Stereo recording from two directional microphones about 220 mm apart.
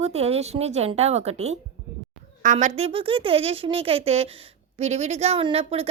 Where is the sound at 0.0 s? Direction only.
30° right (ahead or behind).